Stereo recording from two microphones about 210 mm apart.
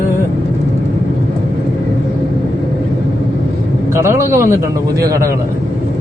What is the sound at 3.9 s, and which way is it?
A man's voice, 15° right (ahead or behind).